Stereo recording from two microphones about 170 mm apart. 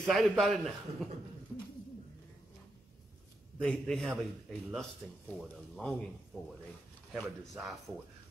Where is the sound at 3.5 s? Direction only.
5° left (ahead or behind).